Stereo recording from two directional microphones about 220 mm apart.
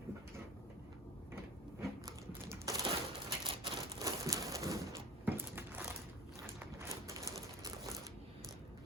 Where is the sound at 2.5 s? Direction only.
15° right (ahead or behind).